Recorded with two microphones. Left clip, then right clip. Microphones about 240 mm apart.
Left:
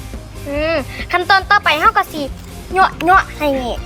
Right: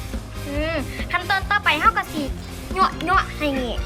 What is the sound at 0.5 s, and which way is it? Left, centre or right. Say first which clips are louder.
Speech: left 8 dB; centre.